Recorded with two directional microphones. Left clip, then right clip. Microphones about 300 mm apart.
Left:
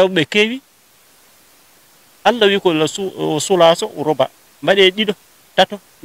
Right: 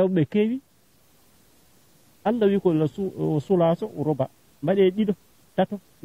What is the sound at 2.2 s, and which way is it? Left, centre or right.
Speech, centre.